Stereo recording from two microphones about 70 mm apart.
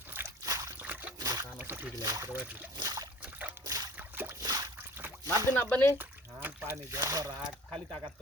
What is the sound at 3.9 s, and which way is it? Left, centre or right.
Boat, right.